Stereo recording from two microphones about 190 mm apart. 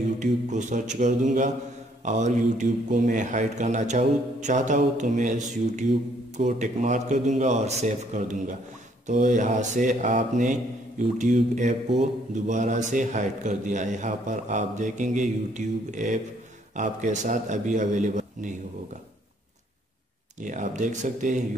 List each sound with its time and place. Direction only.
0.2 s a man's voice: 40° right (ahead or behind)
20.4 s a man's voice: 40° right (ahead or behind)